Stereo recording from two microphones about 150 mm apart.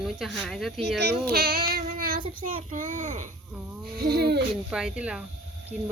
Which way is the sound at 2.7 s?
60° right (ahead or behind).